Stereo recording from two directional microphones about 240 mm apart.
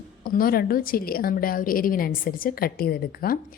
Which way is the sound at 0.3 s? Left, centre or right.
Left.